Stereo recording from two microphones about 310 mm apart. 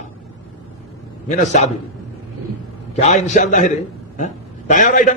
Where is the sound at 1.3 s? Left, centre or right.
Left.